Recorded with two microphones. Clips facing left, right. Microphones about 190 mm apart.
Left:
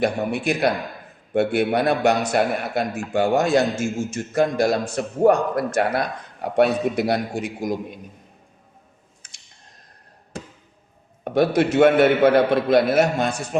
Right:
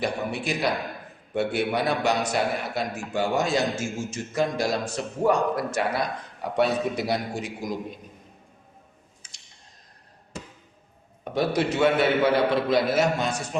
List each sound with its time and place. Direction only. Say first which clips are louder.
0.0 s a man's voice: left 6 dB; 55° left (ahead or behind)
9.2 s a sound: left 1 dB; 50° left (ahead or behind)
11.2 s a man's voice: left 6 dB; 55° left (ahead or behind)